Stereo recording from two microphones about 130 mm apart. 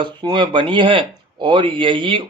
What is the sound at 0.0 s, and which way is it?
A man's voice, 35° right (ahead or behind).